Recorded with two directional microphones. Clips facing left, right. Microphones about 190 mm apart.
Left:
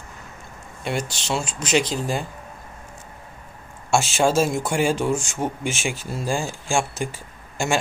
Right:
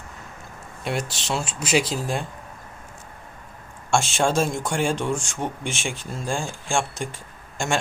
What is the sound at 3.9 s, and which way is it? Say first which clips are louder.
Speech: left 2 dB; 5° left (ahead or behind).